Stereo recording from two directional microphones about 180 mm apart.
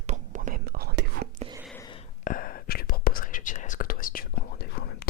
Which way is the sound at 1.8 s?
25° left (ahead or behind).